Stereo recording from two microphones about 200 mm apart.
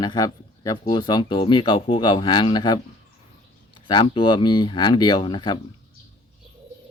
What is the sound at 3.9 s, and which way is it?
Speech, 25° left (ahead or behind).